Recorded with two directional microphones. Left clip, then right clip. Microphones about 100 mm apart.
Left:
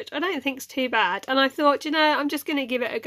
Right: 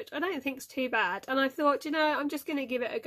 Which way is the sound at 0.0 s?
15° left (ahead or behind).